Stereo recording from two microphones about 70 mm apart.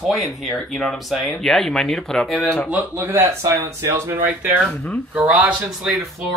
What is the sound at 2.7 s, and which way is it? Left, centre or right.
Speech, right.